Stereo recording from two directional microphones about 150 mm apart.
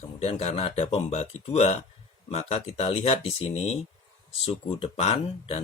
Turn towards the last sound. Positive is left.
turn(degrees=45)  # may be behind; listen again after turning